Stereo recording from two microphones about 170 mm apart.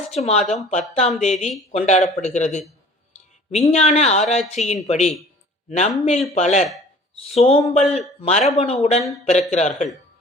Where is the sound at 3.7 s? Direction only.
40° left (ahead or behind).